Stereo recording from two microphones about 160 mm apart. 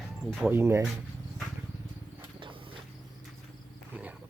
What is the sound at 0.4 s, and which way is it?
Speech, 15° right (ahead or behind).